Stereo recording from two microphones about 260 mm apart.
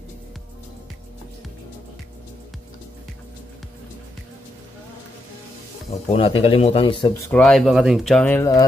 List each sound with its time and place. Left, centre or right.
6.0 s speech: left
7.2 s speech: centre